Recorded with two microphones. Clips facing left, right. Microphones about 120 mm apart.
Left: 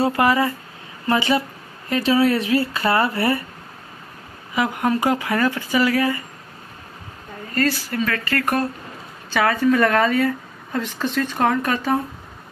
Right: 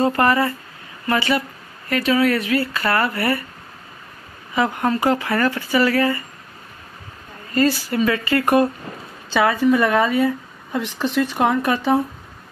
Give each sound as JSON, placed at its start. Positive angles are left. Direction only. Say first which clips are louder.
{"t": 0.0, "sound": "speech", "louder": "right 1 dB", "side_deg": 10}
{"t": 1.0, "sound": "speech", "louder": "left 1 dB", "side_deg": 20}
{"t": 4.6, "sound": "speech", "louder": "right 1 dB", "side_deg": 10}
{"t": 7.5, "sound": "speech", "louder": "right 3 dB", "side_deg": -15}